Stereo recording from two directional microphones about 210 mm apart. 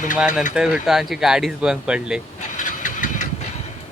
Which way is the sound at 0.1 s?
5° right (ahead or behind).